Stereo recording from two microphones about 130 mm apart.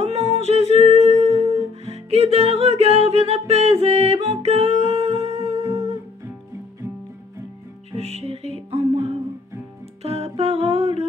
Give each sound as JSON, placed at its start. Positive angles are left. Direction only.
{"t": 0.0, "sound": "music", "side_deg": -55}
{"t": 8.0, "sound": "music", "side_deg": -50}